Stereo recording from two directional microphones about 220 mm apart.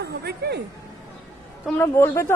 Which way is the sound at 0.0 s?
45° right (ahead or behind).